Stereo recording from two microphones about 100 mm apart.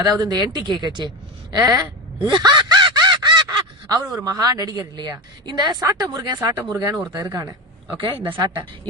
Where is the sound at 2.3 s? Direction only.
50° right (ahead or behind).